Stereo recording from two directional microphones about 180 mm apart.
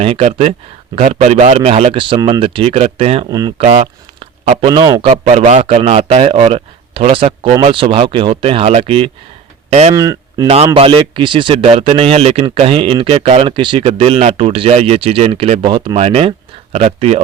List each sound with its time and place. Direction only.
0.0 s speech: 35° right (ahead or behind)
3.2 s speech: 20° right (ahead or behind)
3.6 s speech: 35° right (ahead or behind)
5.0 s speech: 35° right (ahead or behind)
9.9 s speech: 20° right (ahead or behind)
10.8 s speech: 30° right (ahead or behind)